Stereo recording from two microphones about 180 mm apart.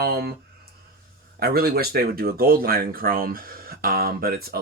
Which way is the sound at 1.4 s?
60° right (ahead or behind).